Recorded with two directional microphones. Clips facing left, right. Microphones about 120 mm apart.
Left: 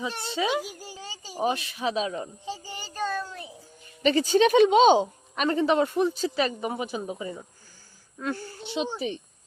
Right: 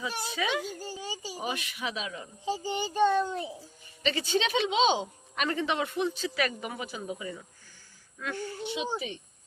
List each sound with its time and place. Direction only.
0.1 s a child's voice: 5° right (ahead or behind)
0.3 s speech: 30° left (ahead or behind)
0.6 s speech: 10° left (ahead or behind)
0.9 s a sound: 15° right (ahead or behind)
1.3 s speech: 35° left (ahead or behind)
2.6 s child singing: 20° right (ahead or behind)
4.0 s speech: 40° left (ahead or behind)
6.4 s speech: 25° left (ahead or behind)
7.1 s speech: 35° left (ahead or behind)